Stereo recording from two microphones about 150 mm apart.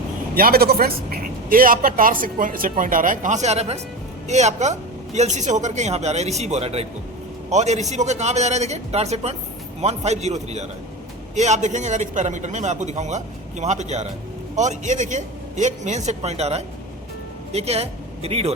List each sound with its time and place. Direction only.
0.3 s a man's voice: 85° right; by 18.5 s 40° right (ahead or behind)